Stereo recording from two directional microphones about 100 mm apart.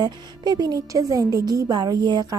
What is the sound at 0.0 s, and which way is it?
A woman's voice, 45° right (ahead or behind).